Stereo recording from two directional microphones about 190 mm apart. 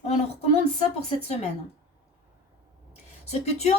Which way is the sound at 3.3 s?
35° left (ahead or behind).